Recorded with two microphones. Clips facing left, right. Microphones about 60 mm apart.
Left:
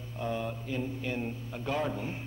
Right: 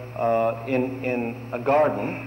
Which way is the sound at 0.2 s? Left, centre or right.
Right.